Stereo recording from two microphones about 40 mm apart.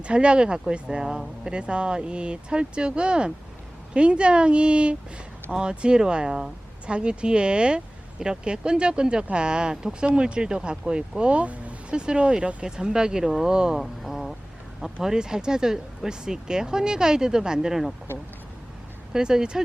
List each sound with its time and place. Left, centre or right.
0.0 s speech: right
13.8 s speech: centre
15.0 s speech: centre
19.1 s speech: centre